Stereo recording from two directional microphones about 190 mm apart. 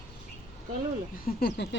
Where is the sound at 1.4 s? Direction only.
60° left (ahead or behind).